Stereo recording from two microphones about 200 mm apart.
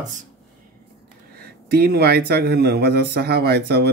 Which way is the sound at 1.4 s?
50° right (ahead or behind).